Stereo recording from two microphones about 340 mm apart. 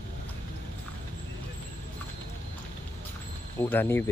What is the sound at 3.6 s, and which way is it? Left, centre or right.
Speech, centre.